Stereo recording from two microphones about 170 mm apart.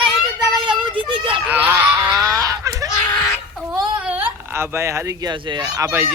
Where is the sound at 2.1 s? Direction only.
20° right (ahead or behind).